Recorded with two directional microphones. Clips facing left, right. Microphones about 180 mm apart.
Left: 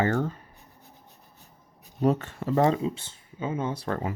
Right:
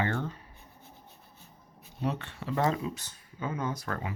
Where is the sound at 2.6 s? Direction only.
25° left (ahead or behind).